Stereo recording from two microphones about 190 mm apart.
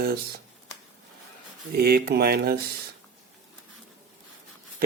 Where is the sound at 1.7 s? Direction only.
55° right (ahead or behind).